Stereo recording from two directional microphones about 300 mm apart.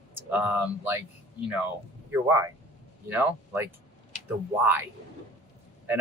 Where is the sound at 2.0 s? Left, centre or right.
Centre.